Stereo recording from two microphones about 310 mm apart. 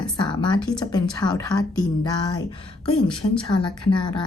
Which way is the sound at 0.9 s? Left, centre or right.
Centre.